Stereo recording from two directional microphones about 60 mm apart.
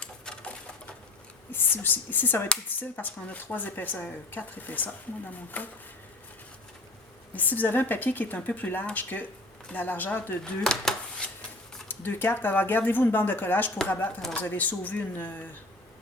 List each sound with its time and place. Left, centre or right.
0.0 s typewriter: centre
1.5 s speech: left
7.3 s speech: left
10.4 s a sound: centre
11.9 s speech: left